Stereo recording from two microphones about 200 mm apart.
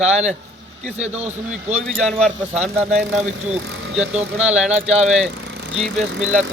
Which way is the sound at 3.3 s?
75° right (ahead or behind).